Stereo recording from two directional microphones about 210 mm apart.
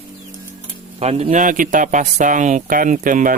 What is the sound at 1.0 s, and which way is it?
Speech, 30° right (ahead or behind).